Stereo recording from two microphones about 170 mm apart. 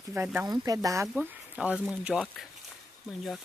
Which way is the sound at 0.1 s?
10° right (ahead or behind).